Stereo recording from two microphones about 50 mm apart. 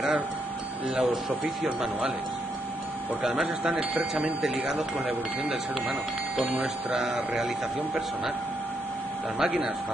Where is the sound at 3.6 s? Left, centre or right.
Right.